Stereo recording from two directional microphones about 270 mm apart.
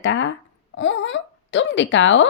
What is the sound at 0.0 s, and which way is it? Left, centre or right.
Babbling, left.